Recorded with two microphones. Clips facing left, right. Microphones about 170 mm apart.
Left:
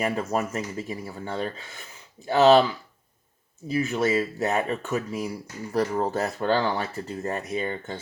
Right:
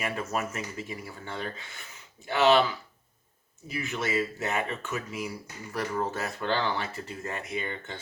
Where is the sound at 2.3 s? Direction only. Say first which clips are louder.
Left 5 dB; 40° left (ahead or behind).